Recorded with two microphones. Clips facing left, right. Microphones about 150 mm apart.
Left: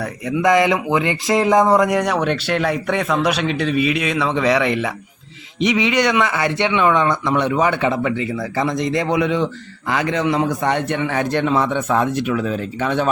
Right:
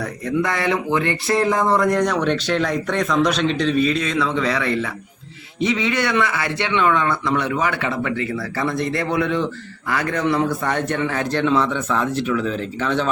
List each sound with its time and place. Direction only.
0.3 s a man's voice: 15° left (ahead or behind)
12.5 s a man's voice: 15° left (ahead or behind)